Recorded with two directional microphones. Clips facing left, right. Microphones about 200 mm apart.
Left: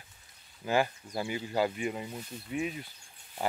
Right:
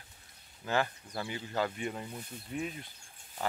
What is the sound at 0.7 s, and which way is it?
Speech, 10° left (ahead or behind).